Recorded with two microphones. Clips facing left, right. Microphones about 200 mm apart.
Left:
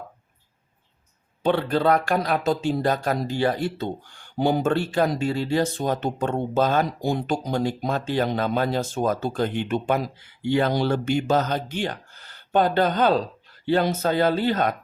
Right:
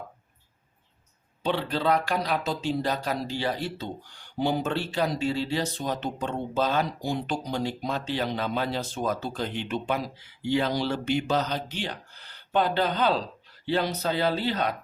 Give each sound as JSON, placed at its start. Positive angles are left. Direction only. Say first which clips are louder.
{"t": 1.4, "sound": "speech", "louder": "left 6 dB", "side_deg": 50}